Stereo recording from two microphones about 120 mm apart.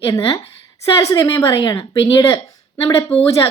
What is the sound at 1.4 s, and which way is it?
Speech, 30° left (ahead or behind).